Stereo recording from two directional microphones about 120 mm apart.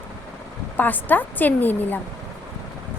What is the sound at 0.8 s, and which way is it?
A woman's voice, 15° left (ahead or behind).